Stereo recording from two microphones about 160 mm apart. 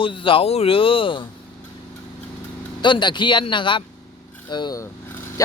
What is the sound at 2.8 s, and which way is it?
Speech, 30° left (ahead or behind).